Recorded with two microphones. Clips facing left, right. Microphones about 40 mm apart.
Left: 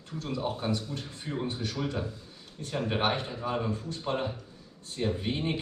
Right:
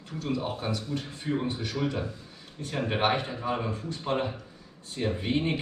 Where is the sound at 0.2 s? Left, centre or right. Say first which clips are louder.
Right 1 dB; centre.